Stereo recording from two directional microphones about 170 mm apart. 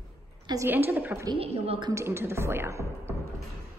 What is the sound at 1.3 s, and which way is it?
Speech, 35° right (ahead or behind).